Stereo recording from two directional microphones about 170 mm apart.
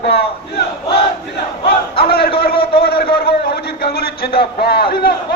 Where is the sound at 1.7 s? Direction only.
65° left (ahead or behind).